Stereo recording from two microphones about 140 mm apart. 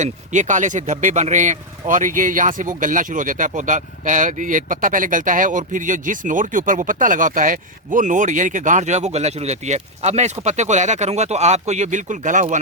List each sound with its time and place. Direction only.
0.0 s speech: 60° right (ahead or behind)